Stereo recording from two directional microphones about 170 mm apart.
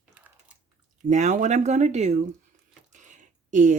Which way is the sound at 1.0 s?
45° right (ahead or behind).